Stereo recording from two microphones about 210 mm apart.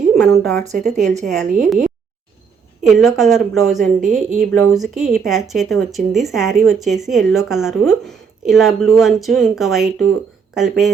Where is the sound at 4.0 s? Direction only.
35° right (ahead or behind).